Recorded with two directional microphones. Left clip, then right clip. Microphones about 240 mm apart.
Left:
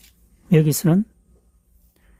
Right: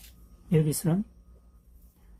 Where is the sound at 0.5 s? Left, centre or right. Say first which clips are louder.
Left 9 dB; left.